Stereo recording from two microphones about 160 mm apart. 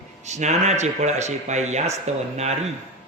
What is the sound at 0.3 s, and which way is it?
A man's voice, 45° right (ahead or behind).